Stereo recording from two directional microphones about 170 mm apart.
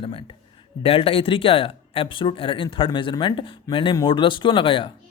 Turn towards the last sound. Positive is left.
turn(degrees=30)  # may be behind; listen again after turning